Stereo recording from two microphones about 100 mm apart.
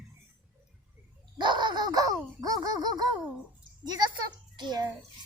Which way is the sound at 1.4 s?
50° right (ahead or behind).